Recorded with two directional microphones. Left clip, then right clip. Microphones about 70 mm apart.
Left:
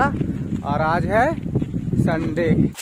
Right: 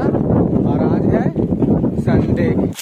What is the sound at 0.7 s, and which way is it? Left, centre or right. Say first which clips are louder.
Speech: right 2 dB; left.